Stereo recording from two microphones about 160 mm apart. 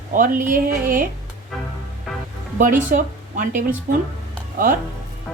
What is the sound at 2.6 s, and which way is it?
Speech, 55° right (ahead or behind).